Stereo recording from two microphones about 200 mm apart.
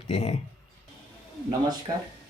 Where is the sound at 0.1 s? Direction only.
35° left (ahead or behind).